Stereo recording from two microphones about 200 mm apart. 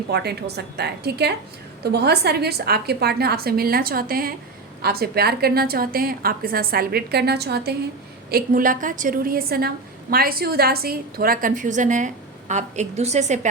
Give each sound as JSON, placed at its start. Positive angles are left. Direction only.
{"t": 0.1, "sound": "a woman's voice", "side_deg": -55}